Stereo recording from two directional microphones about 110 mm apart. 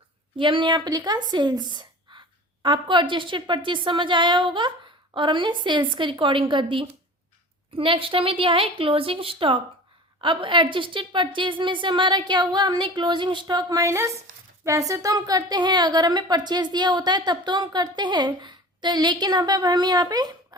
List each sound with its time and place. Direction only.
0.3 s a woman's voice: 50° right (ahead or behind)